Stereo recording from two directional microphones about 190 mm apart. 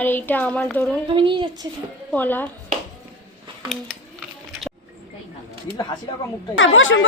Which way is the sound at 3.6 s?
Centre (ahead or behind).